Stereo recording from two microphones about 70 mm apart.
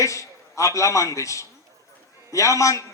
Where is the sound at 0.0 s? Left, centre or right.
Left.